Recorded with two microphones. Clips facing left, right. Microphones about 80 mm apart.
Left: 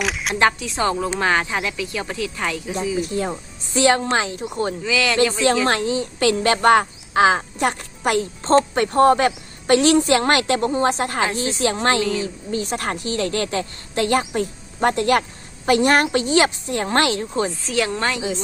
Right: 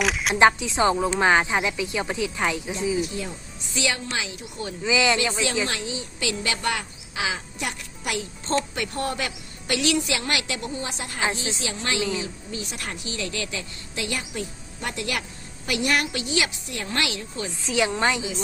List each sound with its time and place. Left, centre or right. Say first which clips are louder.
0.0 s single-lens reflex camera: even; centre
0.3 s speech: right 1 dB; centre
3.0 s speech: left 6 dB; left
4.8 s speech: right 3 dB; centre
5.6 s a woman's voice: left 10 dB; left
17.7 s speech: left 1 dB; centre